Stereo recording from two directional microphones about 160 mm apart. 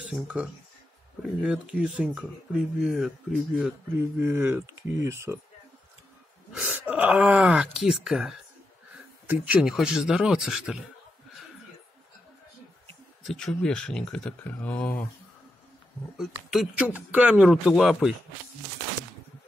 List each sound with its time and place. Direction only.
0.0 s speech: 5° right (ahead or behind)
4.2 s speech: 15° right (ahead or behind)
6.5 s speech: 5° right (ahead or behind)
13.2 s speech: centre (ahead or behind)
16.2 s speech: 5° right (ahead or behind)